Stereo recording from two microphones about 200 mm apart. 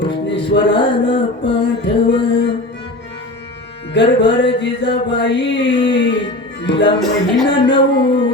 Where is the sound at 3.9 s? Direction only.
60° left (ahead or behind).